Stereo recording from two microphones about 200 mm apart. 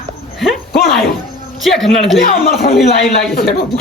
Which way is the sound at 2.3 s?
45° left (ahead or behind).